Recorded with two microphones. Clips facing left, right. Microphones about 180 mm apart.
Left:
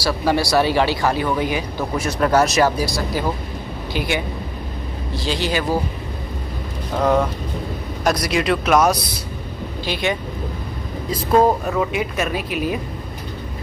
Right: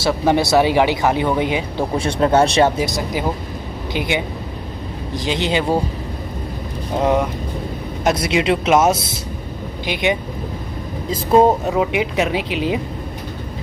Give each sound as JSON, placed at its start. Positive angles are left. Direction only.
{"t": 0.0, "sound": "speech", "side_deg": -20}
{"t": 7.0, "sound": "speech", "side_deg": -15}
{"t": 11.3, "sound": "speech", "side_deg": -20}
{"t": 12.3, "sound": "a woman's voice", "side_deg": -90}
{"t": 12.5, "sound": "speech", "side_deg": -20}